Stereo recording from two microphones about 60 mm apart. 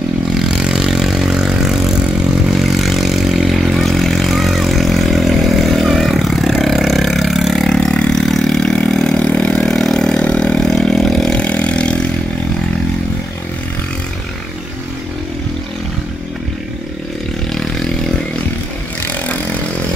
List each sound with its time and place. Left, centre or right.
0.3 s vehicle: centre
11.3 s engine: left
17.5 s vehicle: centre
19.0 s chainsaw: left